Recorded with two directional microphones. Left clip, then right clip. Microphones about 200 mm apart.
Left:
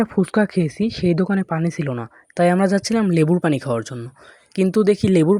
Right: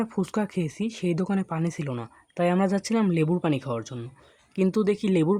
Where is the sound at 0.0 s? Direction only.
30° left (ahead or behind).